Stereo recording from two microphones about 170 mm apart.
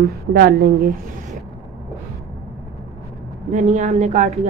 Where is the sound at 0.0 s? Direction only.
65° right (ahead or behind).